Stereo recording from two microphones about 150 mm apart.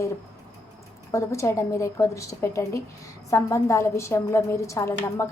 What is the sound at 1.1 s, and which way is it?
A woman's voice, 20° left (ahead or behind).